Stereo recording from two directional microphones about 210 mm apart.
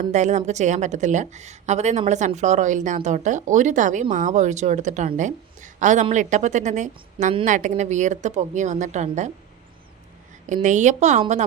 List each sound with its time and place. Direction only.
0.0 s a woman's voice: 35° right (ahead or behind)
10.4 s a woman's voice: 35° right (ahead or behind)